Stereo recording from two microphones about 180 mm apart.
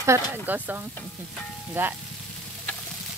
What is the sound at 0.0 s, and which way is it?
Speech, 15° right (ahead or behind).